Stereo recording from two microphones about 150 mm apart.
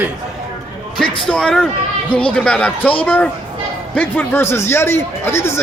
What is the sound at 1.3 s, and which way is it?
A man's voice, 5° left (ahead or behind).